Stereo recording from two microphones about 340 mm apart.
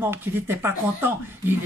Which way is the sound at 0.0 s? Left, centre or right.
Centre.